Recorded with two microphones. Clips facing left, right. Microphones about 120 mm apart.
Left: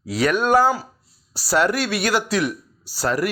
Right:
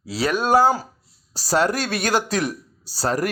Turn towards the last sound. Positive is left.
turn(degrees=-40)  # may be behind; listen again after turning